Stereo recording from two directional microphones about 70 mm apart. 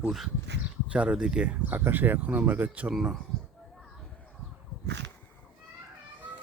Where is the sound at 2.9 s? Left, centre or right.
Centre.